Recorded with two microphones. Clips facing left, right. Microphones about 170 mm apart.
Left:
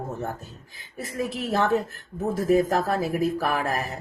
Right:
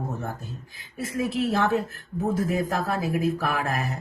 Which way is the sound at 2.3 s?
40° left (ahead or behind).